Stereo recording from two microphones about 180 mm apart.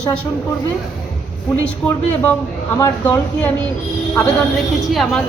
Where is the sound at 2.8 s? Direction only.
15° left (ahead or behind).